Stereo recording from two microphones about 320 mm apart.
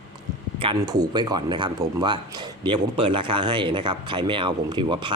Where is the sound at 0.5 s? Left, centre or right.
Centre.